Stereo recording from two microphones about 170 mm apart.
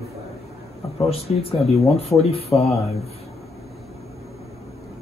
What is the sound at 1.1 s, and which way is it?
Speech, 35° left (ahead or behind).